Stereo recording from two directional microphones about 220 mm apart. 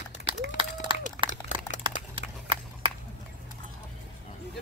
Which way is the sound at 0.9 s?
20° right (ahead or behind).